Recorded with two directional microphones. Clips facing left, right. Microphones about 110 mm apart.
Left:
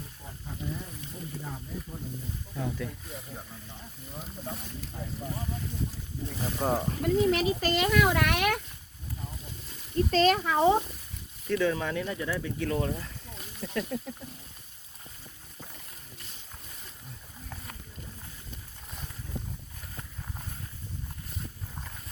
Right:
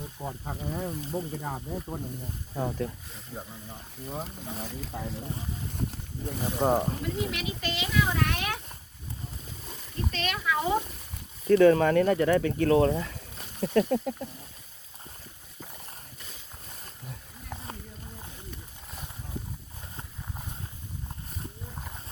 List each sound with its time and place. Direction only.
0.2 s speech: 65° right (ahead or behind)
2.6 s speech: 40° right (ahead or behind)
4.1 s speech: 70° right (ahead or behind)
4.9 s speech: 80° right
6.4 s speech: 20° right (ahead or behind)
7.0 s speech: 40° left (ahead or behind); by 8.5 s 65° left (ahead or behind)
10.1 s speech: 35° left (ahead or behind)
11.4 s speech: 50° right (ahead or behind); by 13.1 s 65° right (ahead or behind)
13.6 s speech: 50° right (ahead or behind)